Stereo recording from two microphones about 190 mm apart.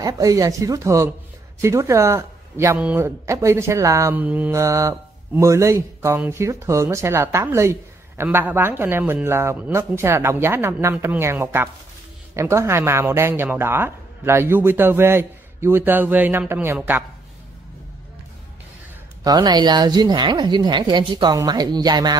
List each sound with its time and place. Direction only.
0.0 s speech: 20° right (ahead or behind)
19.2 s a woman's voice: 20° right (ahead or behind)